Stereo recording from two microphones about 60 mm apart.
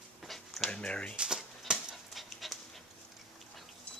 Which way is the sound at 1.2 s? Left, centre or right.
Centre.